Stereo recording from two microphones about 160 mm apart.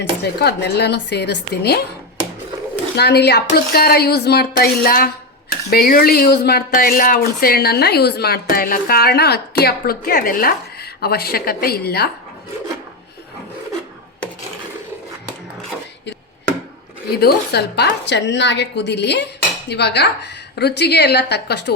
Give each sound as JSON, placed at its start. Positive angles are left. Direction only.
{"t": 0.0, "sound": "a woman's voice", "side_deg": 90}
{"t": 2.9, "sound": "speech", "side_deg": 90}
{"t": 17.1, "sound": "a woman's voice", "side_deg": 80}